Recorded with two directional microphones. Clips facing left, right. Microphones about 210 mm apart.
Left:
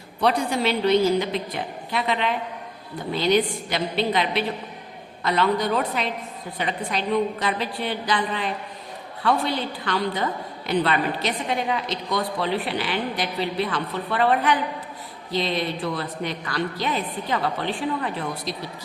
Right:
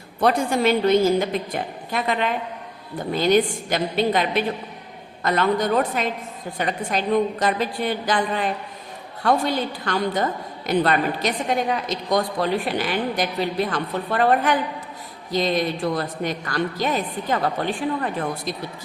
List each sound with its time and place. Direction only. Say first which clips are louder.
0.2 s a woman's voice: right 3 dB; 45° right (ahead or behind)